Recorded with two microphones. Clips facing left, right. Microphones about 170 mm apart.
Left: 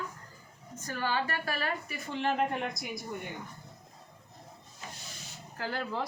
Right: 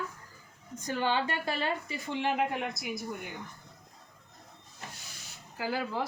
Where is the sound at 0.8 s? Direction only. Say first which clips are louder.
Right 3 dB; 20° right (ahead or behind); by 3.3 s 5° right (ahead or behind).